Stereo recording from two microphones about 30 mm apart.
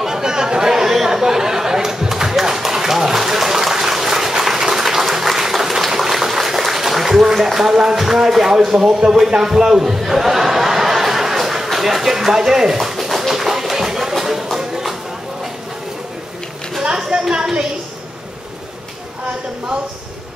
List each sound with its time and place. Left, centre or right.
0.0 s chatter: centre
5.9 s boiling: centre
6.1 s a sound: centre
7.5 s speech: centre
9.4 s chuckle: centre
12.3 s speech: centre
12.7 s a sound: centre
13.3 s music: centre
16.8 s a sound: right